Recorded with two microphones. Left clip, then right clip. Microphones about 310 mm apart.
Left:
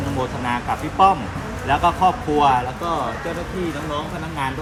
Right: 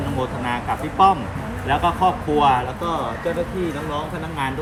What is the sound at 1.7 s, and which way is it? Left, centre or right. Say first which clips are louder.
Speech: left 2 dB; centre.